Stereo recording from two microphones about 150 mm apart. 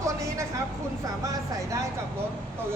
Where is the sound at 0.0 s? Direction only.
20° right (ahead or behind).